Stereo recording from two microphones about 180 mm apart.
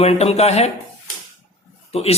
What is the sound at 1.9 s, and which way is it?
Speech, 35° left (ahead or behind).